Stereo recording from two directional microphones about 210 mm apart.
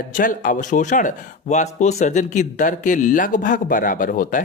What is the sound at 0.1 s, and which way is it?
Speech, 40° left (ahead or behind).